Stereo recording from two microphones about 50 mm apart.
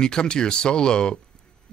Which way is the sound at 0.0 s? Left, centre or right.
Centre.